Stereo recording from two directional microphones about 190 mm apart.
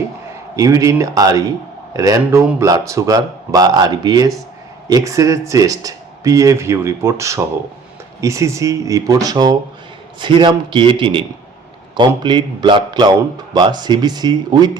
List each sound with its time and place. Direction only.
0.5 s a man's voice: 15° right (ahead or behind)